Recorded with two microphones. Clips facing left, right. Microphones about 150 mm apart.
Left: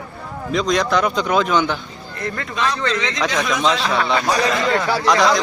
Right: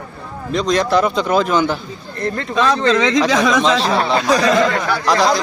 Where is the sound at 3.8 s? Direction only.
35° right (ahead or behind).